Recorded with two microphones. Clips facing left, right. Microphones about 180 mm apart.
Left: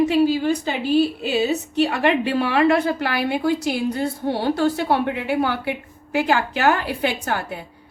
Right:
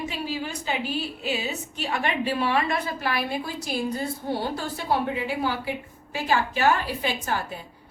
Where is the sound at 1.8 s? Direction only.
70° left (ahead or behind).